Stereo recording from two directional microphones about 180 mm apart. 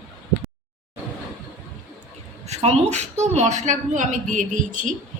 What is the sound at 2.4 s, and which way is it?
A woman's voice, 35° right (ahead or behind).